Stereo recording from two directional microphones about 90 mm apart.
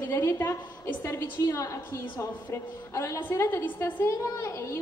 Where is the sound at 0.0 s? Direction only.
25° left (ahead or behind).